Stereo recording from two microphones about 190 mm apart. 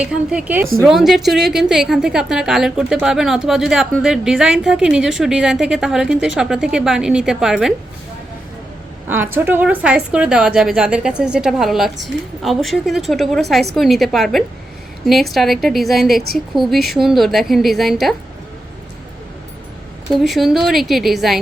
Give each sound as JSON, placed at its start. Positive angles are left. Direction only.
{"t": 0.0, "sound": "a woman's voice", "side_deg": -5}
{"t": 9.0, "sound": "a woman's voice", "side_deg": -10}
{"t": 20.2, "sound": "a woman's voice", "side_deg": 0}